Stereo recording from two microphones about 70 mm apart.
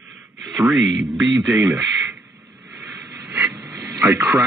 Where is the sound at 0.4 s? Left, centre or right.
Centre.